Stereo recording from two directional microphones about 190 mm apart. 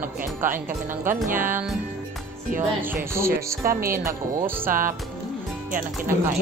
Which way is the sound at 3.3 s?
50° right (ahead or behind).